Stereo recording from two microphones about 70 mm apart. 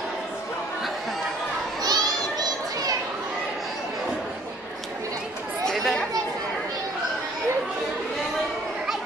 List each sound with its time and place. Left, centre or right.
1.8 s children playing: right
5.7 s chatter: centre